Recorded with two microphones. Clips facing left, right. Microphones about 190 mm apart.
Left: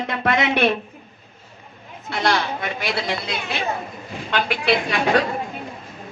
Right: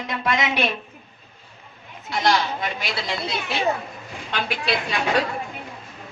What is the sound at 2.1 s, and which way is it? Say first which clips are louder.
Speech: even; 60° left (ahead or behind).